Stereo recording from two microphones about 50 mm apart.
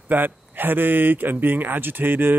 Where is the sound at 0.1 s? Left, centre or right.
Right.